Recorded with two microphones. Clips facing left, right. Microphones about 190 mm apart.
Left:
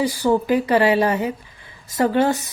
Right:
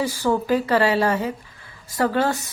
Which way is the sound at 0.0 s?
15° left (ahead or behind).